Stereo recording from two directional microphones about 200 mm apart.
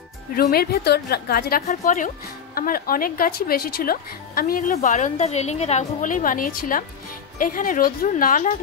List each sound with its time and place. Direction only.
0.4 s a woman's voice: 50° left (ahead or behind)